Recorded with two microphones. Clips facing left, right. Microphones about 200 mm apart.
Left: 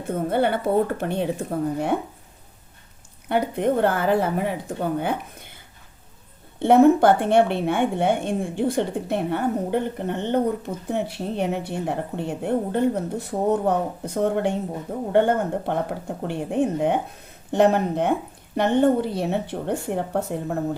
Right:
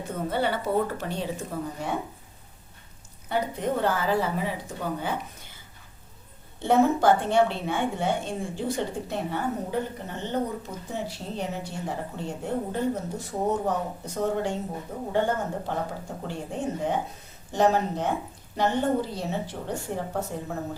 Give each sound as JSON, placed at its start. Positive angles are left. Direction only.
{"t": 0.0, "sound": "a woman's voice", "side_deg": 55}
{"t": 3.2, "sound": "a woman's voice", "side_deg": 60}
{"t": 6.6, "sound": "a woman's voice", "side_deg": 60}